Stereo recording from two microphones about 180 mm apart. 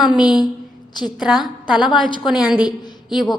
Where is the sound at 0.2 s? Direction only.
25° left (ahead or behind).